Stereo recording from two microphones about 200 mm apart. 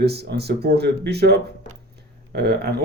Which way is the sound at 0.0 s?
55° right (ahead or behind).